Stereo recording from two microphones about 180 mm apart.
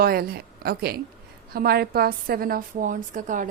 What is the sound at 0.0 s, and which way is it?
A woman's voice, 55° right (ahead or behind).